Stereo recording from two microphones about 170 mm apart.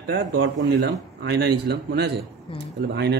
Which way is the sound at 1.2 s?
75° right (ahead or behind).